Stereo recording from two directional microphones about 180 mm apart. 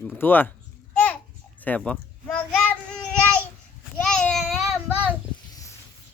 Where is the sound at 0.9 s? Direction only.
10° left (ahead or behind).